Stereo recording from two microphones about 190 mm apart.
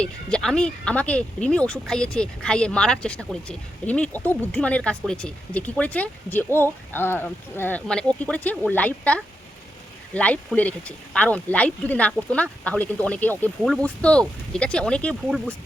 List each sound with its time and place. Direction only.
0.0 s speech: 5° left (ahead or behind)